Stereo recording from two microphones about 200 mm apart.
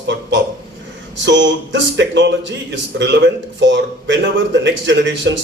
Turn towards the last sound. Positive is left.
turn(degrees=-65)  # may be behind; listen again after turning